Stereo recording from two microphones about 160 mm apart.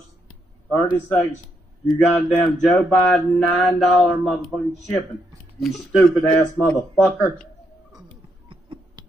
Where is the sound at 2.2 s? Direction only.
10° left (ahead or behind).